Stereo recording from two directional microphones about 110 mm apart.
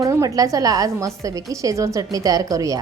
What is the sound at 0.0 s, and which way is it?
A woman's voice, 30° right (ahead or behind).